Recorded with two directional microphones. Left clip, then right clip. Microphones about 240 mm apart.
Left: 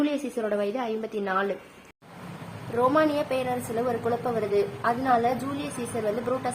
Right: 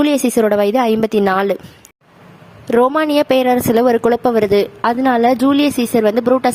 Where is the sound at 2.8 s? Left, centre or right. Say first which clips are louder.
Right 10 dB; right.